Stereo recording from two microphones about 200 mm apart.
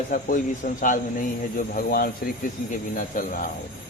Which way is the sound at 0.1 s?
40° left (ahead or behind).